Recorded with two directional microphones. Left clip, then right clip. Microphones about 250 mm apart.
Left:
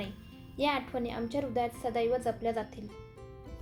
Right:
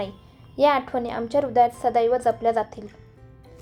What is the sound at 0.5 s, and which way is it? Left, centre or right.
A woman's voice, centre.